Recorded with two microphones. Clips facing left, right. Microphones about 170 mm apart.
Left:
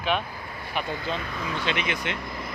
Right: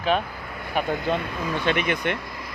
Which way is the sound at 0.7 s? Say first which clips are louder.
Right 6 dB; 50° right (ahead or behind).